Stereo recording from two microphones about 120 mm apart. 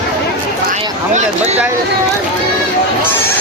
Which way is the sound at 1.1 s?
70° right (ahead or behind).